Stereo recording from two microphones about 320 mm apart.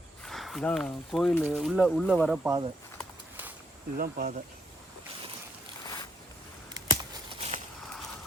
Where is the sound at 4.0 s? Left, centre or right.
Right.